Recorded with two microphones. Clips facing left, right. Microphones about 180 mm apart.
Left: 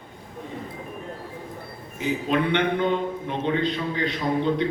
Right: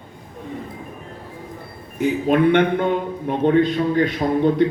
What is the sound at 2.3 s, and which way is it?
A man's voice, 50° right (ahead or behind).